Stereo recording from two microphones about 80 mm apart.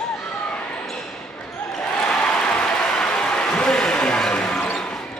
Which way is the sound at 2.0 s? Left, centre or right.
Centre.